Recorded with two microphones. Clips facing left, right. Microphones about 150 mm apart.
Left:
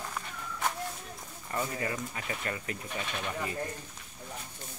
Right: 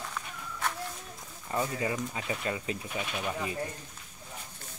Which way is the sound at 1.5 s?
15° right (ahead or behind).